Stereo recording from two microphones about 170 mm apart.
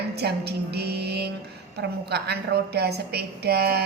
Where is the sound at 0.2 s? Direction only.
75° right (ahead or behind).